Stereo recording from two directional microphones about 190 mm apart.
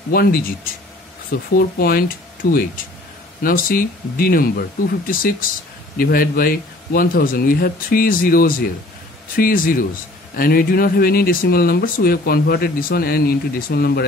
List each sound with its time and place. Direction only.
0.1 s speech: 50° left (ahead or behind)